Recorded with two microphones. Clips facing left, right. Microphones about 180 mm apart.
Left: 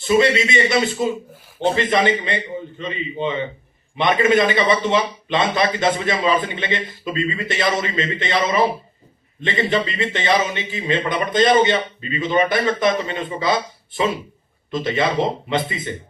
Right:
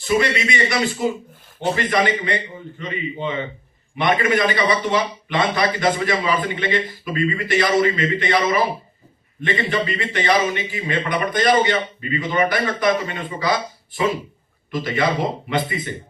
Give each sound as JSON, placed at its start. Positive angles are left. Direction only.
{"t": 0.0, "sound": "a man's voice", "side_deg": 25}